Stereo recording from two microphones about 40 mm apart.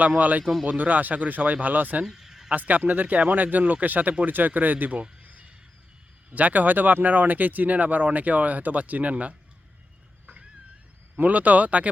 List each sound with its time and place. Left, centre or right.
0.2 s speech: right
2.0 s a sound: centre
2.5 s speech: right
5.2 s a sound: right
6.3 s speech: right
11.2 s speech: right